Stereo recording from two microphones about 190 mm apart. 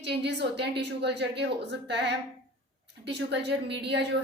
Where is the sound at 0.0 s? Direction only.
65° right (ahead or behind).